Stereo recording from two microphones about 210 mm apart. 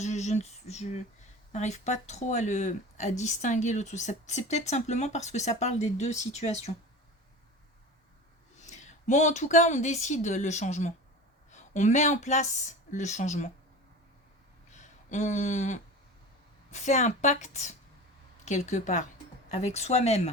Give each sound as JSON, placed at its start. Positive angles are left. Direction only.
{"t": 0.0, "sound": "speech", "side_deg": 35}
{"t": 8.6, "sound": "speech", "side_deg": 35}
{"t": 14.7, "sound": "speech", "side_deg": 35}